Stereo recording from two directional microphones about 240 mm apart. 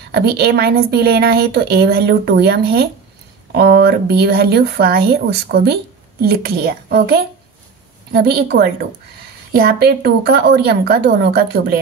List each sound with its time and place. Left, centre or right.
0.1 s speech: right